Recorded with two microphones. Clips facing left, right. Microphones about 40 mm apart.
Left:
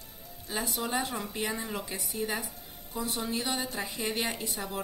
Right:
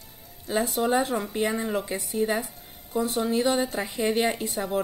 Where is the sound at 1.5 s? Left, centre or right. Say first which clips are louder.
Right 7 dB; centre.